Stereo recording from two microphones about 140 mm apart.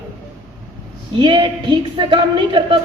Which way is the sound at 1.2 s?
35° right (ahead or behind).